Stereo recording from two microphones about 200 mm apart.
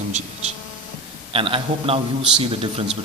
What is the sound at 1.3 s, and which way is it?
A man's voice, 25° right (ahead or behind).